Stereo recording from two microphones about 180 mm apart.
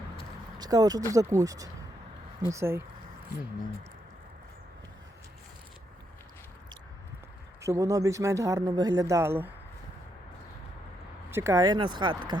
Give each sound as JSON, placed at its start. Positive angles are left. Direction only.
{"t": 0.6, "sound": "speech", "side_deg": -20}
{"t": 7.6, "sound": "speech", "side_deg": -15}
{"t": 11.3, "sound": "speech", "side_deg": -15}